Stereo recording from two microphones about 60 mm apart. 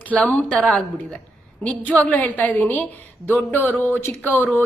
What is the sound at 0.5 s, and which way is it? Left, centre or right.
Speech, centre.